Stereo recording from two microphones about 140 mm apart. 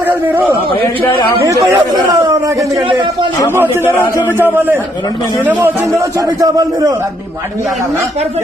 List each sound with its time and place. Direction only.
0.3 s a man's voice: 10° right (ahead or behind)
1.4 s a man's voice: 25° right (ahead or behind)
3.9 s speech: 15° left (ahead or behind)
4.4 s a man's voice: 15° right (ahead or behind)
6.1 s a man's voice: 25° right (ahead or behind)